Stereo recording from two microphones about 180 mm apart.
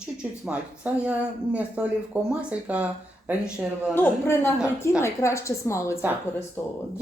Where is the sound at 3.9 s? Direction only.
15° left (ahead or behind).